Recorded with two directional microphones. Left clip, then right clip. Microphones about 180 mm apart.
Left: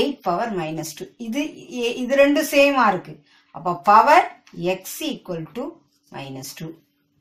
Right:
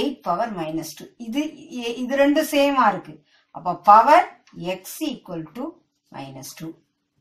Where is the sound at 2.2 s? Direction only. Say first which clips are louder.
Left 3 dB; 20° left (ahead or behind).